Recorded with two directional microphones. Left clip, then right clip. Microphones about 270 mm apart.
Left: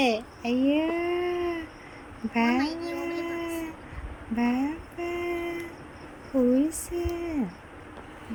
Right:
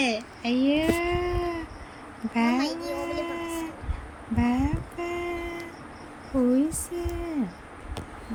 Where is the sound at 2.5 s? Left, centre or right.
Right.